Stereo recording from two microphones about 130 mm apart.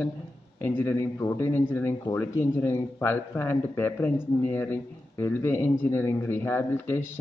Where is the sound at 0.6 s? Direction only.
15° left (ahead or behind).